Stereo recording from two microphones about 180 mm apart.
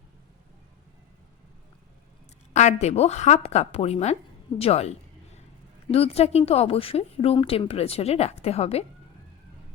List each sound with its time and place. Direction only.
2.5 s speech: 40° left (ahead or behind)